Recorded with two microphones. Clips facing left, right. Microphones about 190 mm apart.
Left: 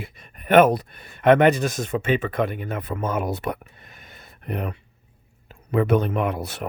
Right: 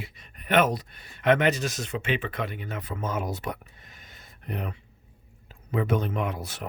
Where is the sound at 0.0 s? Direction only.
50° left (ahead or behind).